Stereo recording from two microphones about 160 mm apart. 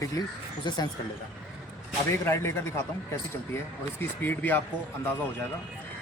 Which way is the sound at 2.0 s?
15° left (ahead or behind).